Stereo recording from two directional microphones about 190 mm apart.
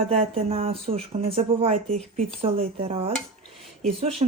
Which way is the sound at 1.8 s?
5° left (ahead or behind).